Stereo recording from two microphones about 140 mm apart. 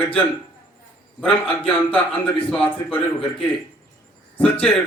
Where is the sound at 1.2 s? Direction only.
10° left (ahead or behind).